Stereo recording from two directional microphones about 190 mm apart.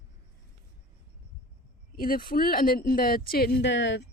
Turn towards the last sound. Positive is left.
turn(degrees=70)  # may be behind; listen again after turning